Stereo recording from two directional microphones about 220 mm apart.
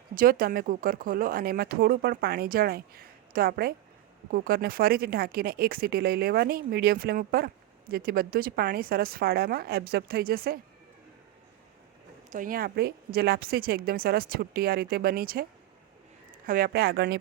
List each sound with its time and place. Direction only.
0.1 s speech: 40° right (ahead or behind)
12.3 s speech: 40° right (ahead or behind)
16.5 s speech: 40° right (ahead or behind)